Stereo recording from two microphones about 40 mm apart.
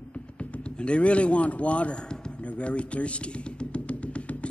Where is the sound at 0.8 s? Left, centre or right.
Left.